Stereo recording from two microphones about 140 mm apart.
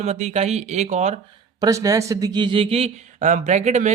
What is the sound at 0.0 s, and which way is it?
Speech, 50° right (ahead or behind).